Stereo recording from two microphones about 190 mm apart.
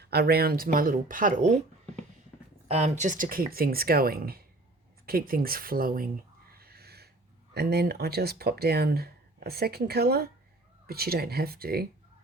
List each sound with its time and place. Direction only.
0.0 s speech: 60° right (ahead or behind)
2.6 s speech: 35° right (ahead or behind)
6.5 s a sound: 55° right (ahead or behind)
7.5 s speech: 55° right (ahead or behind)